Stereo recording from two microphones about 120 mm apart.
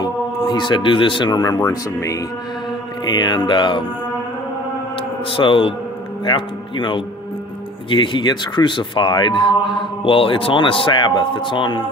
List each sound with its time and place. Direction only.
0.0 s speech: 35° left (ahead or behind)
3.0 s music: 35° left (ahead or behind)
5.3 s speech: 45° left (ahead or behind)
6.2 s music: 40° left (ahead or behind)
7.9 s speech: 40° left (ahead or behind)